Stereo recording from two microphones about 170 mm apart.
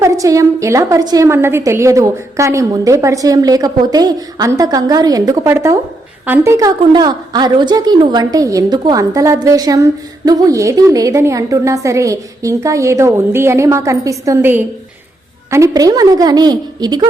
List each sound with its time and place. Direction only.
0.0 s a woman's voice: 20° right (ahead or behind)